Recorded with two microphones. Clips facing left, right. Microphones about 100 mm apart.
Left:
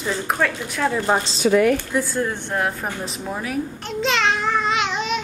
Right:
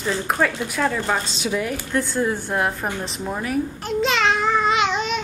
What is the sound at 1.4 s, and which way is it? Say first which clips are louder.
Speech: left 8 dB; 60° left (ahead or behind).